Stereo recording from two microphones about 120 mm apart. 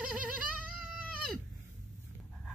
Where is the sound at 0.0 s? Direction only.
10° right (ahead or behind).